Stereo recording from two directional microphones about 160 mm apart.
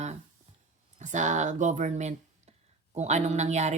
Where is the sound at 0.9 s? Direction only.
50° right (ahead or behind).